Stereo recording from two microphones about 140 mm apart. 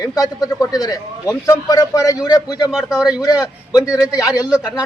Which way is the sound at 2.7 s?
5° right (ahead or behind).